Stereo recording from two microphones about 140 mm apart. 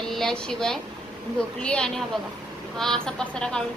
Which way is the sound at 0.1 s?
5° left (ahead or behind).